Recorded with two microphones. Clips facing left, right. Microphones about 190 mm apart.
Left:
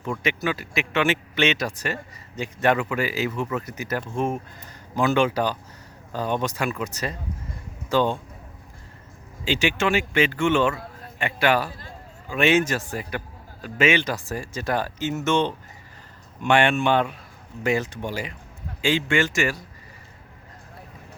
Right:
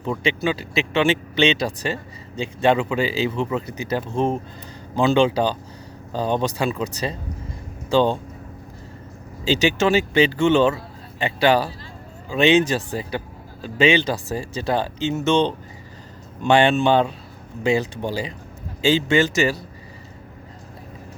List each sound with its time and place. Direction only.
0.0 s speech: 25° right (ahead or behind)
9.6 s speech: 35° right (ahead or behind)